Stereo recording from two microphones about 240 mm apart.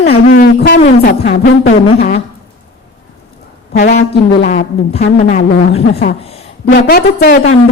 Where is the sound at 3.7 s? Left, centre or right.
Left.